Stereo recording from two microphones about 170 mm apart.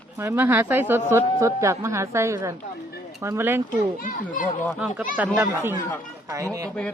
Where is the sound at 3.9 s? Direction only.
50° left (ahead or behind).